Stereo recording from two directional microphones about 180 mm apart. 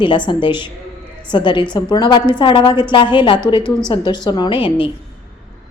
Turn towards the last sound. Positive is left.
turn(degrees=30)  # may be behind; listen again after turning